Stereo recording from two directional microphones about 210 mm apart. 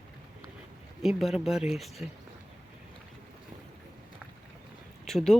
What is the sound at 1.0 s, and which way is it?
Speech, centre (ahead or behind).